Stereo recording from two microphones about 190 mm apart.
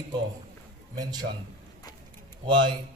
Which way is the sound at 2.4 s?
25° right (ahead or behind).